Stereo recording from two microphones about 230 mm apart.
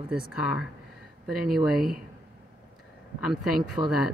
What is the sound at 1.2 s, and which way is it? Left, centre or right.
Speech, centre.